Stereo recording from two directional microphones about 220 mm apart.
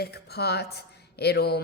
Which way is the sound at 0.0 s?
45° left (ahead or behind).